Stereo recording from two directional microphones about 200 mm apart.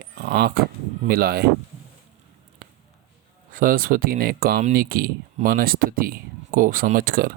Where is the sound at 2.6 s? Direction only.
45° right (ahead or behind).